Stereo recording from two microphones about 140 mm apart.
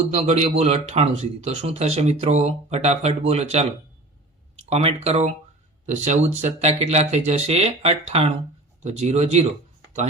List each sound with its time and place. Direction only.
0.1 s speech: 55° right (ahead or behind)
4.7 s speech: 50° right (ahead or behind)